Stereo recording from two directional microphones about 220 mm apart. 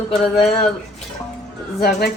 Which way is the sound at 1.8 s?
45° left (ahead or behind).